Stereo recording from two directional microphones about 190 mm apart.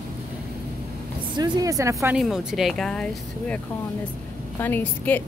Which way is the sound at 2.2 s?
Centre (ahead or behind).